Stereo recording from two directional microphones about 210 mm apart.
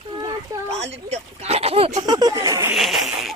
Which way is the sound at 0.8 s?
30° right (ahead or behind).